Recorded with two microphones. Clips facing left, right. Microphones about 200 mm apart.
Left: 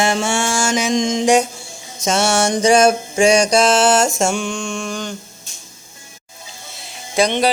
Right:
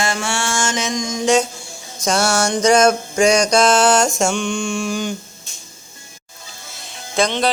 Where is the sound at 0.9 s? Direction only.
25° left (ahead or behind).